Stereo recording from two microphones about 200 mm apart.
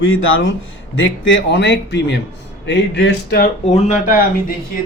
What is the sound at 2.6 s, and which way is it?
Speech, 60° left (ahead or behind).